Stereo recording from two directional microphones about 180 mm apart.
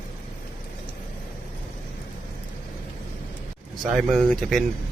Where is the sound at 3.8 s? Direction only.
Centre (ahead or behind).